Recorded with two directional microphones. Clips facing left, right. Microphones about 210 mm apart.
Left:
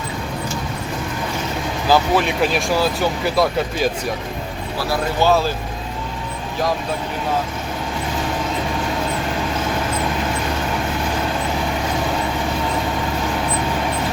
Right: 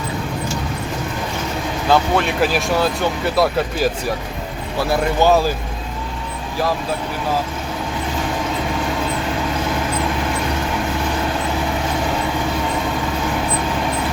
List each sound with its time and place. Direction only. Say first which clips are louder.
1.9 s speech: even; centre (ahead or behind)
5.2 s speech: right 1 dB; 15° right (ahead or behind)